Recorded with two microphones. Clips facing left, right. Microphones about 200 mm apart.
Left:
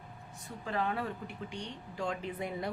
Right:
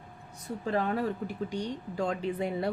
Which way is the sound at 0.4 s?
35° right (ahead or behind).